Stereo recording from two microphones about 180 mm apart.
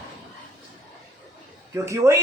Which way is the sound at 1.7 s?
15° right (ahead or behind).